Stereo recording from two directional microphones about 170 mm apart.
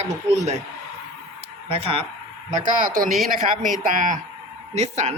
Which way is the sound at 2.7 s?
55° right (ahead or behind).